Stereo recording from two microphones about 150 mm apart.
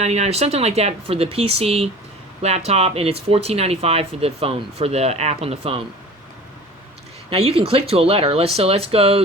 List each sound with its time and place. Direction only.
0.0 s speech: 50° right (ahead or behind)
7.3 s speech: 40° right (ahead or behind)